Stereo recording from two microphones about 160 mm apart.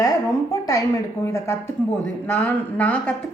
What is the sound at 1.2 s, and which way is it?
A woman's voice, 15° left (ahead or behind).